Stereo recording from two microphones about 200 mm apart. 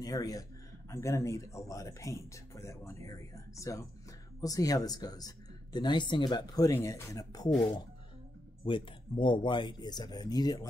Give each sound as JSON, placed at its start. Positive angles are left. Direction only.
{"t": 0.0, "sound": "speech", "side_deg": 15}
{"t": 8.6, "sound": "speech", "side_deg": 25}